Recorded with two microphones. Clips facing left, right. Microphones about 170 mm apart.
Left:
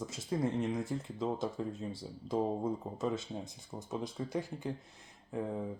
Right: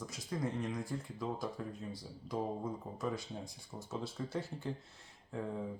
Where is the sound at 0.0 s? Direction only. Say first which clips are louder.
Left 5 dB; 25° left (ahead or behind).